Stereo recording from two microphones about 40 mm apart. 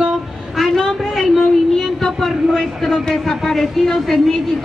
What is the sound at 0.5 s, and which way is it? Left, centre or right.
Speech, centre.